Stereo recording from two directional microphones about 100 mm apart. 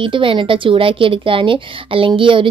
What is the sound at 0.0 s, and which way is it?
A woman's voice, 60° right (ahead or behind).